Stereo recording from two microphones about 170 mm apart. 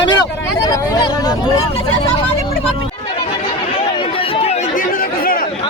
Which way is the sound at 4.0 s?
30° left (ahead or behind).